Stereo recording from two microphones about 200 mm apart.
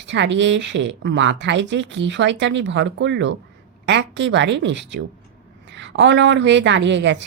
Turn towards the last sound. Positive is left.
turn(degrees=-65)  # may be behind; listen again after turning